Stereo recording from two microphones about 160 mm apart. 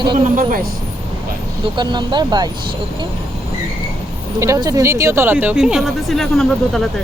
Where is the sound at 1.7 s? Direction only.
30° right (ahead or behind).